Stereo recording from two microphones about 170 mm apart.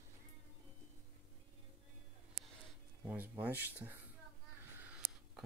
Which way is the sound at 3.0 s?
10° right (ahead or behind).